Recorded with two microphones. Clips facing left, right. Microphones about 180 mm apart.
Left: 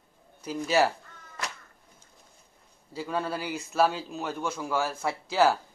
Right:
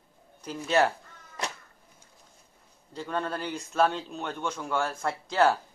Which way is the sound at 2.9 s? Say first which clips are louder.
Left 1 dB; 5° left (ahead or behind).